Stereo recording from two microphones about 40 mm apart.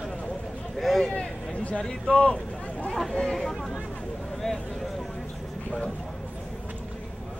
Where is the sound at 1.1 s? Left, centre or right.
Left.